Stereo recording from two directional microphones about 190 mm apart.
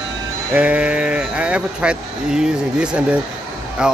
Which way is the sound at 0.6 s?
5° right (ahead or behind).